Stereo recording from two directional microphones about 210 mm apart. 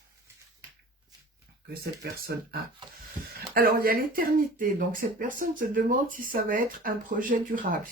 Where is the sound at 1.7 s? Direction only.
45° right (ahead or behind).